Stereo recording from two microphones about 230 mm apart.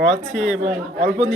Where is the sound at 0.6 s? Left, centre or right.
Right.